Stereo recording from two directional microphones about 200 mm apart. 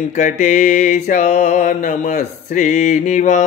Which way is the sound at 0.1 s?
40° left (ahead or behind).